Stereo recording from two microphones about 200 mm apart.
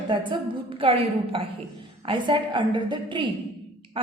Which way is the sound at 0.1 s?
25° right (ahead or behind).